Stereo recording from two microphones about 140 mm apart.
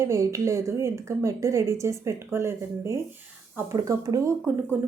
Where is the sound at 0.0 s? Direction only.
20° right (ahead or behind).